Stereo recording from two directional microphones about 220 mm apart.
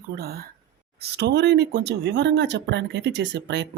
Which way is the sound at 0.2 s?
45° right (ahead or behind).